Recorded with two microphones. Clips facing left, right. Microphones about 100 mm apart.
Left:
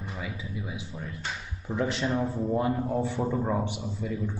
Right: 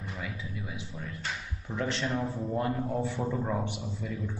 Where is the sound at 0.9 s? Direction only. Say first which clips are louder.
Left 1 dB; 15° left (ahead or behind).